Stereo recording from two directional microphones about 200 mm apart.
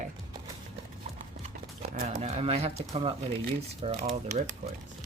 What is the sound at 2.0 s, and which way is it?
Speech, 35° right (ahead or behind).